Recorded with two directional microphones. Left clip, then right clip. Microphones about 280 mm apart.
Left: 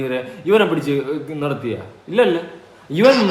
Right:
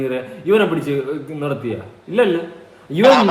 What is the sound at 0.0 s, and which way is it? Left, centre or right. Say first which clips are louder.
Speech: even; centre.